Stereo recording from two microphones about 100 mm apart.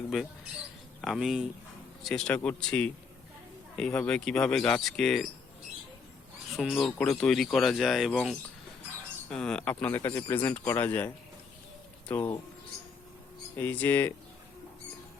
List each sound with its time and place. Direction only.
1.0 s speech: centre (ahead or behind)
2.0 s speech: 10° left (ahead or behind)
6.6 s speech: 5° left (ahead or behind); by 12.3 s 20° left (ahead or behind)
13.6 s speech: 20° left (ahead or behind)